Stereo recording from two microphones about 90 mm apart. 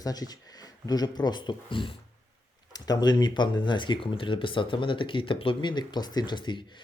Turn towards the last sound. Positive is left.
turn(degrees=60)  # may be behind; listen again after turning